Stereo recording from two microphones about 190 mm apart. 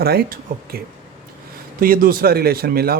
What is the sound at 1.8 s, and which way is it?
Speech, 50° right (ahead or behind).